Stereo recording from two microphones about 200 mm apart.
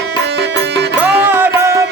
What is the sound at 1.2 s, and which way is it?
Music, 10° right (ahead or behind).